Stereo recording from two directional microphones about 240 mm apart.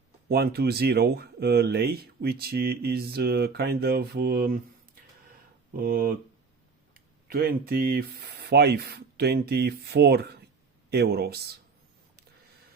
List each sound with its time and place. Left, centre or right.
0.3 s speech: right
5.7 s speech: right